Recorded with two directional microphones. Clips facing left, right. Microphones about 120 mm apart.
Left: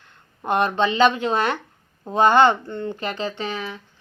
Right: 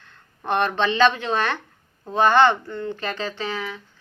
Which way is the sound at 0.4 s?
15° left (ahead or behind).